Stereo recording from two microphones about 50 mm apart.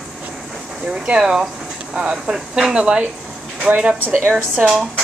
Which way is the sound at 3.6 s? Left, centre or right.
Right.